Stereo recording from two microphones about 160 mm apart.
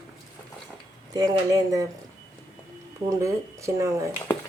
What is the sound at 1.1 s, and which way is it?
Speech, 25° right (ahead or behind).